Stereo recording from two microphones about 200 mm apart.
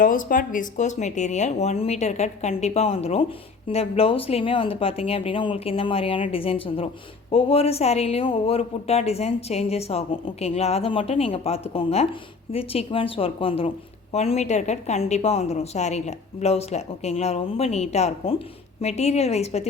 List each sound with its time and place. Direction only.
0.0 s a woman's voice: 40° left (ahead or behind)